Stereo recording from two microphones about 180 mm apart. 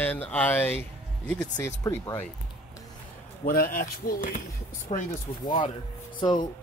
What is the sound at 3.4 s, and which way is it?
Speech, 55° left (ahead or behind).